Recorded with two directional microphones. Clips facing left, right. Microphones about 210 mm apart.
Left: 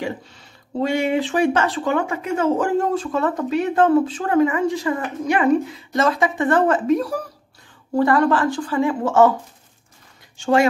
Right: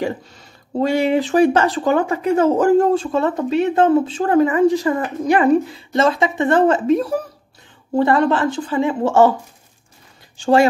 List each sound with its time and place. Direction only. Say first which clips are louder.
0.7 s a woman's voice: right 3 dB; 35° right (ahead or behind)
10.3 s speech: right 3 dB; 35° right (ahead or behind)